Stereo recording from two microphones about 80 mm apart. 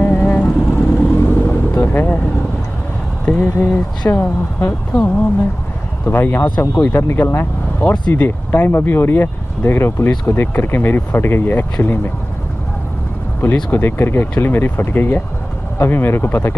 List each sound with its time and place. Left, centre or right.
0.0 s vehicle: centre
3.3 s speech: left
13.7 s speech: left